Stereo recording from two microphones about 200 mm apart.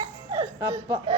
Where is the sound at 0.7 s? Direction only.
30° right (ahead or behind).